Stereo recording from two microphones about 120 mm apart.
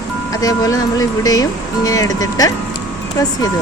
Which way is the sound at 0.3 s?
30° left (ahead or behind).